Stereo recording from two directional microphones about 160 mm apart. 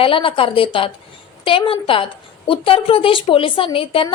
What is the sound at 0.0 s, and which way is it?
A woman's voice, 35° left (ahead or behind).